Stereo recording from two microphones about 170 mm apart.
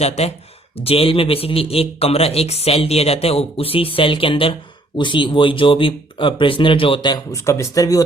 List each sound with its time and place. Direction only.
0.0 s a man's voice: 40° left (ahead or behind); by 8.0 s 20° left (ahead or behind)